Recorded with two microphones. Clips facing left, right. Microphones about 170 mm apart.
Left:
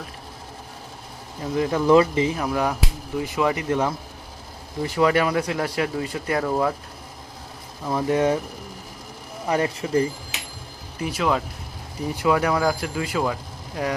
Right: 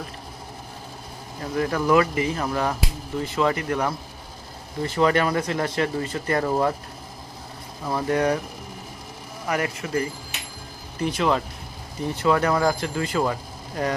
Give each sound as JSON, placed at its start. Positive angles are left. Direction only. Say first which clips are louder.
{"t": 1.4, "sound": "speech", "louder": "left 2 dB", "side_deg": 15}
{"t": 2.3, "sound": "speech", "louder": "left 1 dB", "side_deg": 10}
{"t": 6.4, "sound": "speech", "louder": "even", "side_deg": -5}
{"t": 8.0, "sound": "speech", "louder": "left 2 dB", "side_deg": 20}
{"t": 9.5, "sound": "speech", "louder": "left 3 dB", "side_deg": 30}
{"t": 10.9, "sound": "speech", "louder": "right 1 dB", "side_deg": 5}